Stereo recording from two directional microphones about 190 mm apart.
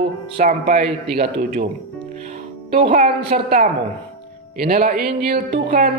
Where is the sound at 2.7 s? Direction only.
35° right (ahead or behind).